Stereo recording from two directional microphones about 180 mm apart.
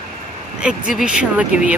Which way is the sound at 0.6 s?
5° right (ahead or behind).